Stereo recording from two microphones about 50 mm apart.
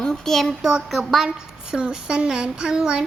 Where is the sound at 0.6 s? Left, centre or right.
Centre.